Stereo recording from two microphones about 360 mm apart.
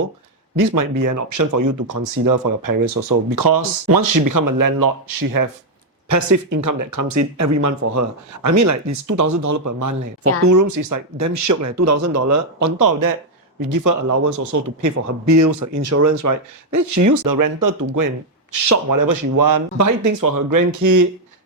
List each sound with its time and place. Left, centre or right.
0.6 s speech: right
6.1 s speech: right